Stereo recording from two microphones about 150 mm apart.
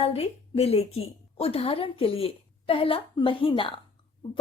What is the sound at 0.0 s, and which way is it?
A woman's voice, 40° left (ahead or behind).